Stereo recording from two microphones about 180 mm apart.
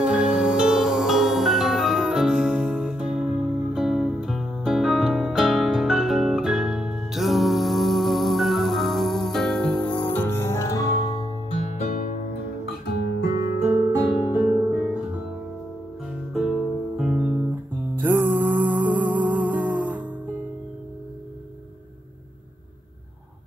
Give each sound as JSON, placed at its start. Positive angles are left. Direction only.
{"t": 0.0, "sound": "music", "side_deg": -5}
{"t": 11.6, "sound": "music", "side_deg": 35}
{"t": 11.9, "sound": "music", "side_deg": 50}
{"t": 12.8, "sound": "guitar", "side_deg": 65}
{"t": 13.3, "sound": "guitar", "side_deg": -20}
{"t": 16.3, "sound": "music", "side_deg": -5}